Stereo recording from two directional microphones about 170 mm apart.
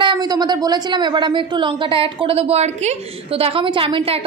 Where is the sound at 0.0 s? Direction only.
25° right (ahead or behind).